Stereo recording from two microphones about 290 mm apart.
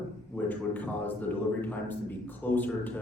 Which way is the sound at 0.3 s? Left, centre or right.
Centre.